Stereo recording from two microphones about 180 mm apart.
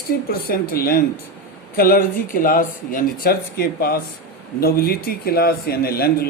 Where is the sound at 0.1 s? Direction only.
60° left (ahead or behind).